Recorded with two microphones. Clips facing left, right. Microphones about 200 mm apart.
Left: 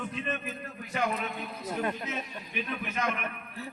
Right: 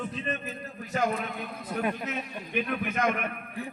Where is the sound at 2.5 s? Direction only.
55° right (ahead or behind).